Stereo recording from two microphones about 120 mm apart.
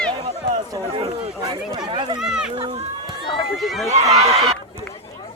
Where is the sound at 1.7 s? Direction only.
40° right (ahead or behind).